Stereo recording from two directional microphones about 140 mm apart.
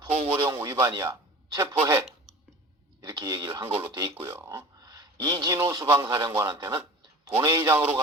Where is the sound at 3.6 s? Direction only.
10° right (ahead or behind).